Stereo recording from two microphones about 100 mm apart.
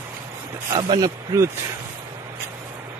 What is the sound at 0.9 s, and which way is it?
Speech, 35° right (ahead or behind).